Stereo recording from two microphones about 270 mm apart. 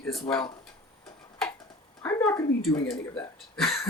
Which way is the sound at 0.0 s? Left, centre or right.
Centre.